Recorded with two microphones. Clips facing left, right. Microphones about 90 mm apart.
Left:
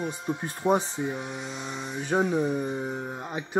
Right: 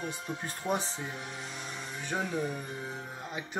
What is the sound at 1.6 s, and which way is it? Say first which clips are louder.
Speech: left 8 dB; 20° left (ahead or behind).